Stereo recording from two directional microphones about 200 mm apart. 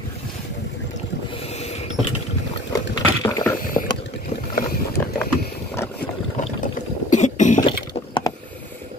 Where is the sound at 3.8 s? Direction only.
20° left (ahead or behind).